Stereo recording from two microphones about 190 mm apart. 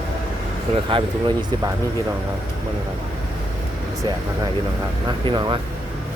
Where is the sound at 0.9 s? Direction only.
25° right (ahead or behind).